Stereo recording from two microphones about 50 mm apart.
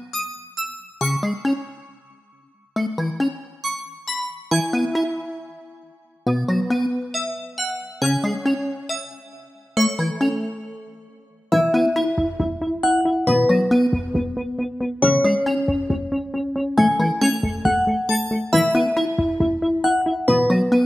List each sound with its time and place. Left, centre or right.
0.1 s music: centre
2.7 s music: centre
6.2 s music: centre
8.5 s music: centre
9.8 s music: centre
11.5 s music: centre